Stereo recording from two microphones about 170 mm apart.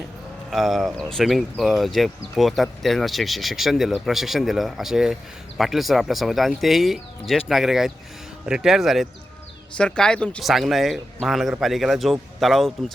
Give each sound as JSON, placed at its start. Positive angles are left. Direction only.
{"t": 0.5, "sound": "speech", "side_deg": 0}